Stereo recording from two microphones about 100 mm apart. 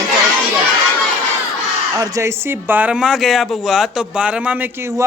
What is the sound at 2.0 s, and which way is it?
Speech, 30° right (ahead or behind).